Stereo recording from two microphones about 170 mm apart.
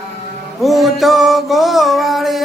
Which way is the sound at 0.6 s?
Centre (ahead or behind).